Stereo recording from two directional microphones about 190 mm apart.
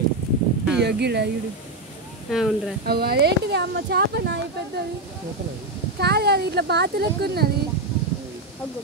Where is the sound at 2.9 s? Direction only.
55° right (ahead or behind).